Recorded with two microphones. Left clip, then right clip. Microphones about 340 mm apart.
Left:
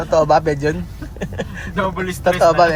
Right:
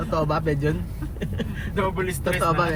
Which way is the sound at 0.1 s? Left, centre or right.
Centre.